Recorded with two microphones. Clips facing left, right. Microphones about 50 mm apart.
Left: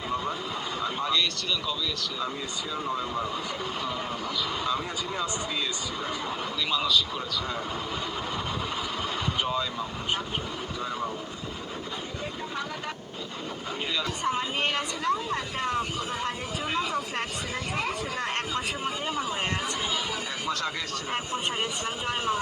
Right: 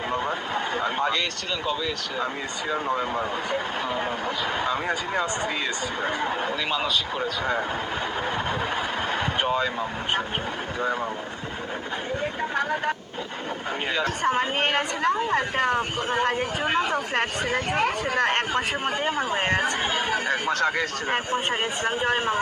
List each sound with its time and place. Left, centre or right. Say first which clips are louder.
0.1 s vehicle: right 3 dB; right
2.7 s speech: right 4 dB; right
4.6 s speech: right 4 dB; right
9.1 s vehicle: right 4 dB; right
13.9 s a woman's voice: right 5 dB; right